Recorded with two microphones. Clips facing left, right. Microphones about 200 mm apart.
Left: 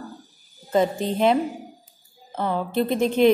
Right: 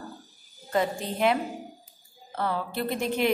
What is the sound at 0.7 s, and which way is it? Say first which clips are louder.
A woman's voice: left 6 dB; 25° left (ahead or behind).